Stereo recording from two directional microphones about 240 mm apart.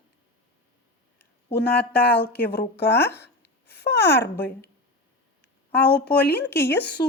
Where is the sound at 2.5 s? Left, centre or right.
Left.